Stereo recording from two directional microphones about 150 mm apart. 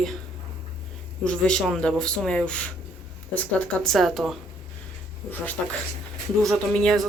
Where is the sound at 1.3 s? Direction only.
5° left (ahead or behind).